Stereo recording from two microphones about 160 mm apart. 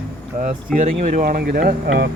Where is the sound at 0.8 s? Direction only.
50° right (ahead or behind); by 2.1 s 70° right (ahead or behind).